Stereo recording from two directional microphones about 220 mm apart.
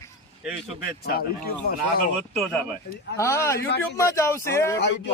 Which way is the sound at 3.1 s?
15° left (ahead or behind).